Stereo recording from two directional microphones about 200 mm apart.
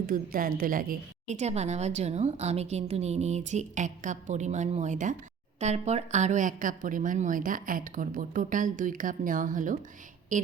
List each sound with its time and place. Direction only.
0.1 s a woman's voice: 45° right (ahead or behind)